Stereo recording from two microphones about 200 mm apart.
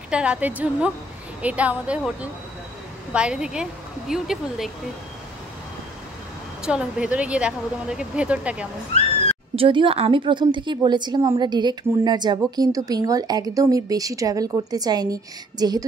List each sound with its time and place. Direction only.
0.1 s a woman's voice: 5° right (ahead or behind)
6.6 s speech: 5° right (ahead or behind)
9.6 s a woman's voice: 25° right (ahead or behind)